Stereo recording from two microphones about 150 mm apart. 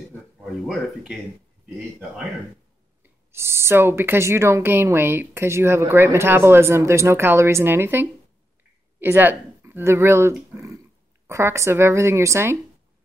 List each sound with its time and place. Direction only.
0.7 s speech: centre (ahead or behind)
3.0 s speech: 15° right (ahead or behind)